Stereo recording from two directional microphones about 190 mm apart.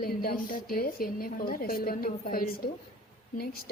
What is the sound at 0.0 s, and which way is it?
A woman's voice, 50° left (ahead or behind).